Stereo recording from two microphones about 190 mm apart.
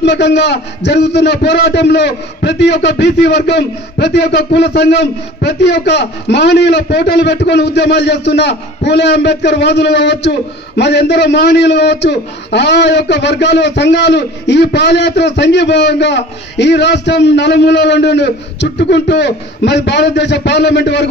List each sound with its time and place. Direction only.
0.0 s a man's voice: 65° left (ahead or behind)